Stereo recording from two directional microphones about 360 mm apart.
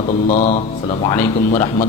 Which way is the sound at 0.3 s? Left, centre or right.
Centre.